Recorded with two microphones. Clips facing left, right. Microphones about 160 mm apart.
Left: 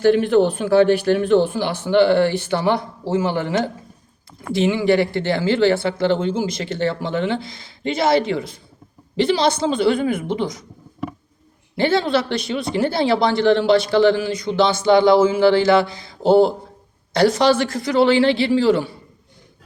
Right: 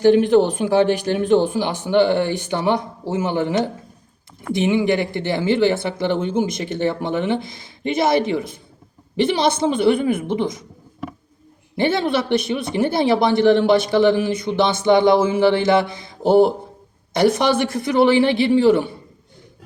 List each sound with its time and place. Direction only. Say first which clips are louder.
0.3 s speech: even; 15° right (ahead or behind)
11.8 s speech: left 1 dB; 20° right (ahead or behind)